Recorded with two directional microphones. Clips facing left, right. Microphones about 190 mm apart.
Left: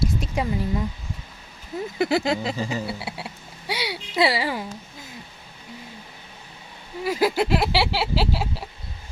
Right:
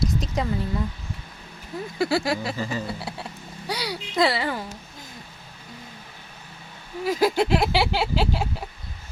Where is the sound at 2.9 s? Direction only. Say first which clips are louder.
Even; 5° left (ahead or behind).